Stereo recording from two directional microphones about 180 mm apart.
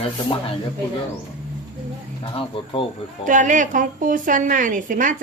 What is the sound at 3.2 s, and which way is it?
A woman's voice, 45° right (ahead or behind).